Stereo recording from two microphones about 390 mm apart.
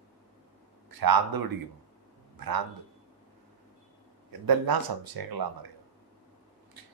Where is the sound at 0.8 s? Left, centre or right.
Right.